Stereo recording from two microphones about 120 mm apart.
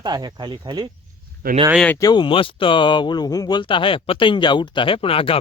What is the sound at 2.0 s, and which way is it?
Speech, 35° left (ahead or behind).